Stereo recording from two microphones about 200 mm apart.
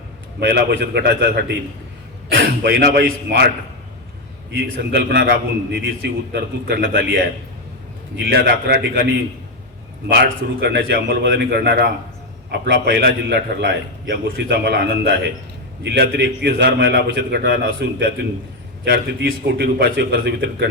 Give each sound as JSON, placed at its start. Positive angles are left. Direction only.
{"t": 0.3, "sound": "a man's voice", "side_deg": -55}
{"t": 2.6, "sound": "a man's voice", "side_deg": -50}
{"t": 4.5, "sound": "a man's voice", "side_deg": -55}
{"t": 10.1, "sound": "a man's voice", "side_deg": -55}